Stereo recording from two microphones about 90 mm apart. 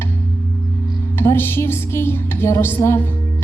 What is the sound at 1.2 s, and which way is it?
A woman's voice, 25° left (ahead or behind).